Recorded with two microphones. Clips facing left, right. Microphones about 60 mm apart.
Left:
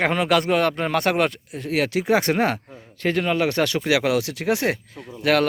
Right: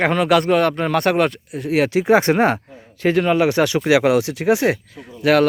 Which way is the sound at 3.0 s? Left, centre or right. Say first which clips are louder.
Right 5 dB; centre.